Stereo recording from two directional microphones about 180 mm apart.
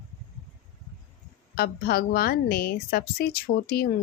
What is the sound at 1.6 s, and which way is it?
A woman's voice, 55° left (ahead or behind).